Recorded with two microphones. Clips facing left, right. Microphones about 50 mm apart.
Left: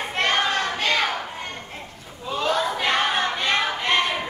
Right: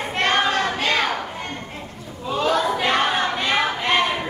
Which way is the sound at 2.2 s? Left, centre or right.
Centre.